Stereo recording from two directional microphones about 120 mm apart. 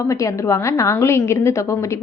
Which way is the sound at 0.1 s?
25° left (ahead or behind).